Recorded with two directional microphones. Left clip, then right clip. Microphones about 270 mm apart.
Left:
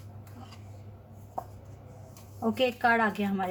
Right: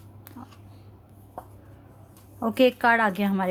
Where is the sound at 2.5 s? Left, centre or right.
Right.